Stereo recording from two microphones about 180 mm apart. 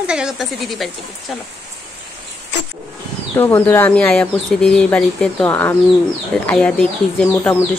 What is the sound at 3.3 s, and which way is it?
Speech, 10° left (ahead or behind).